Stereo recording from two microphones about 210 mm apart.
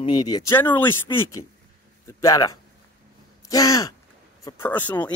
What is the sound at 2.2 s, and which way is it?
Speech, 15° left (ahead or behind).